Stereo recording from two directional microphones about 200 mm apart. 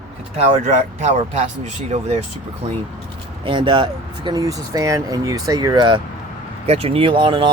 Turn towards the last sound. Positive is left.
turn(degrees=-25)  # may be behind; listen again after turning